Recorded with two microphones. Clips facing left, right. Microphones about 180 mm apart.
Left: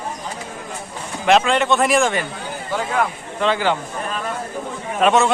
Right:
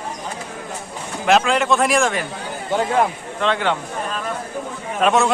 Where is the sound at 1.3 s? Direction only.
Centre (ahead or behind).